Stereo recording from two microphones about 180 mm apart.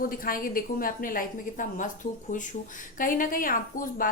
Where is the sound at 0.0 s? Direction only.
50° left (ahead or behind).